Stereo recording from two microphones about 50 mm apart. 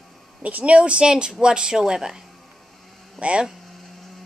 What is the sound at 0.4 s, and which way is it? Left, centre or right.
A woman's voice, right.